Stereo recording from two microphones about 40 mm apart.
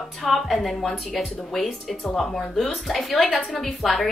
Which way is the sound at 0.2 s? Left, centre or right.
Centre.